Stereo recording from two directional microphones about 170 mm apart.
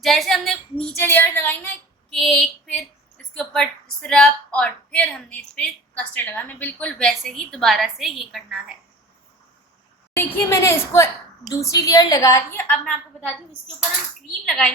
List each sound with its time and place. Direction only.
0.0 s a woman's voice: centre (ahead or behind)
0.9 s female singing: 10° left (ahead or behind)
3.3 s a woman's voice: 5° left (ahead or behind)
10.2 s a woman's voice: 15° left (ahead or behind)